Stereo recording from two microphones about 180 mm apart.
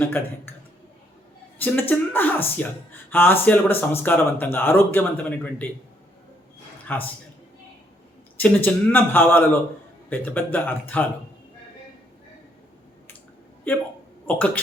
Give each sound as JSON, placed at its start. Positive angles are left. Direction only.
{"t": 0.0, "sound": "speech", "side_deg": 10}
{"t": 1.5, "sound": "speech", "side_deg": 10}
{"t": 6.8, "sound": "a man's voice", "side_deg": 10}
{"t": 8.4, "sound": "speech", "side_deg": 10}
{"t": 13.7, "sound": "speech", "side_deg": 10}